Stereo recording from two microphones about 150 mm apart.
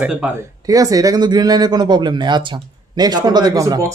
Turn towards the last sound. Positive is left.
turn(degrees=-20)  # may be behind; listen again after turning